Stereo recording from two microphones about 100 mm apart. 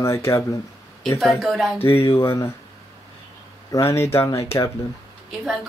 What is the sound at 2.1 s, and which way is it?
Speech, 25° left (ahead or behind).